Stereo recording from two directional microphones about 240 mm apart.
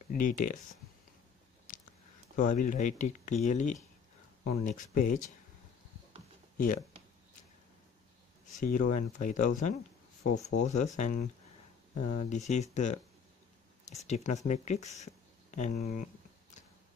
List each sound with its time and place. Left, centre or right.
0.1 s speech: left
2.3 s speech: left
8.5 s speech: left